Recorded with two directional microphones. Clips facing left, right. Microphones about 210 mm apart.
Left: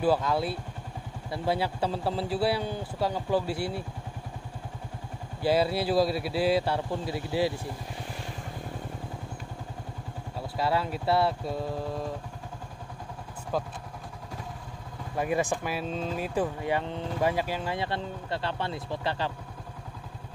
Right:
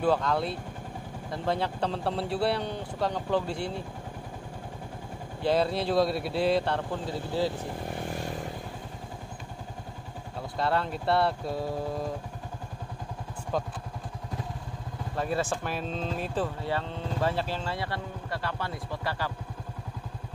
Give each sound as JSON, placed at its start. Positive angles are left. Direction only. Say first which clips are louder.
{"t": 0.0, "sound": "speech", "louder": "left 1 dB", "side_deg": 5}
{"t": 5.4, "sound": "speech", "louder": "left 1 dB", "side_deg": 5}
{"t": 7.9, "sound": "vehicle", "louder": "right 5 dB", "side_deg": -50}
{"t": 10.6, "sound": "speech", "louder": "even", "side_deg": 5}
{"t": 15.1, "sound": "speech", "louder": "left 2 dB", "side_deg": 15}